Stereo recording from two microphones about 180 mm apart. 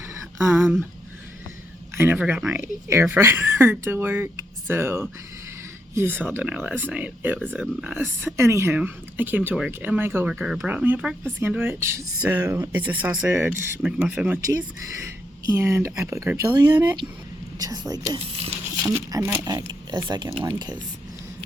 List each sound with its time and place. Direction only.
0.1 s a sound: 15° right (ahead or behind)
2.0 s speech: 10° right (ahead or behind)
15.5 s speech: 15° right (ahead or behind)